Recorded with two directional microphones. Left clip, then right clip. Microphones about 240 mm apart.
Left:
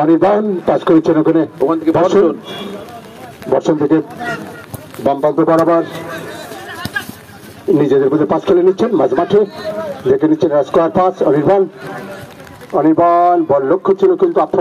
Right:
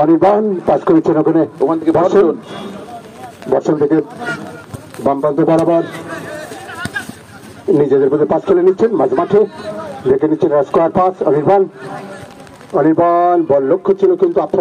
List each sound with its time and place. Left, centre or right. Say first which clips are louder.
0.0 s a man's voice: right 1 dB; left
3.4 s a man's voice: even; left
5.0 s a man's voice: left 1 dB; left
5.4 s a man's voice: left 1 dB; left
7.7 s a man's voice: even; left
12.7 s a man's voice: left 1 dB; left